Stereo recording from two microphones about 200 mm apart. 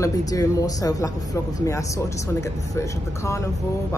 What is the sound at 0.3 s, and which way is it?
Speech, 15° left (ahead or behind).